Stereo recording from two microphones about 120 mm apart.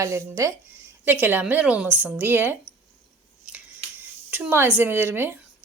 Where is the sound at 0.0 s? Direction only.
25° right (ahead or behind).